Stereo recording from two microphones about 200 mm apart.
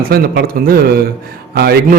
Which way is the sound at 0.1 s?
50° right (ahead or behind).